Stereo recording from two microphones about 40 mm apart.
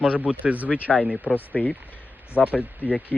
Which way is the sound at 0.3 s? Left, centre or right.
Right.